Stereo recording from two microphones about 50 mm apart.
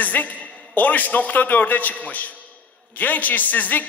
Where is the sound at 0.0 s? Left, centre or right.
Left.